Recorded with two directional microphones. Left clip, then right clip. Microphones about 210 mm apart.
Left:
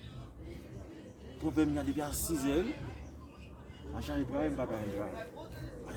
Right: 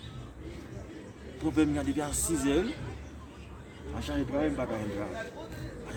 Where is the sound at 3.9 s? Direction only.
Centre (ahead or behind).